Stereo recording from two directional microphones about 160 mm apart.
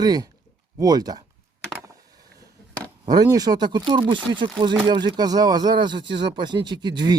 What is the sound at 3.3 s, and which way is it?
Speech, 25° right (ahead or behind).